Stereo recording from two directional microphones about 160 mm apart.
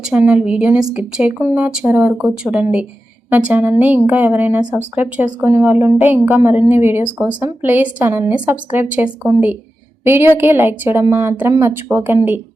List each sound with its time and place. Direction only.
0.0 s a woman's voice: 5° right (ahead or behind)